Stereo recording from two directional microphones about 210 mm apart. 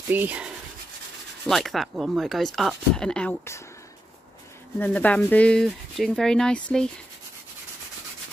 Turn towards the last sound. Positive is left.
turn(degrees=5)  # may be behind; listen again after turning